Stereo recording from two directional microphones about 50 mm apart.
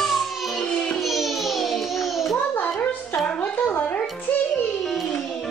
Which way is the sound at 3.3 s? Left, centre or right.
Left.